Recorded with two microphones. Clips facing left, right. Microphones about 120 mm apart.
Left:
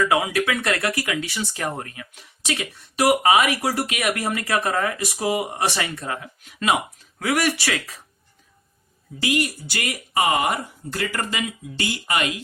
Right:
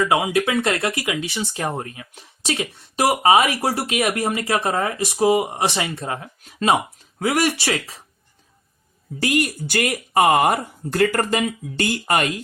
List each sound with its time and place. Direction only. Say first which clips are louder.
0.0 s speech: right 2 dB; 20° right (ahead or behind)
9.2 s speech: right 2 dB; 50° right (ahead or behind)